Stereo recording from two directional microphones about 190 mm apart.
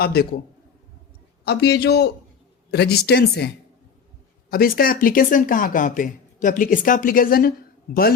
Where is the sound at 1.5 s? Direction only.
60° left (ahead or behind).